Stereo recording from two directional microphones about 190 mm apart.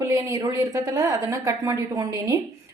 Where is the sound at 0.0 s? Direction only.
20° right (ahead or behind).